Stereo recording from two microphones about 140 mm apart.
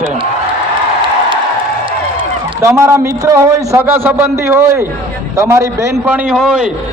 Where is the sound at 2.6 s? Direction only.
20° right (ahead or behind).